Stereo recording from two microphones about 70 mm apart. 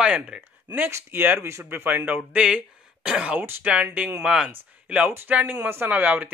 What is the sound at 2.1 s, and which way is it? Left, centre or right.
Speech, centre.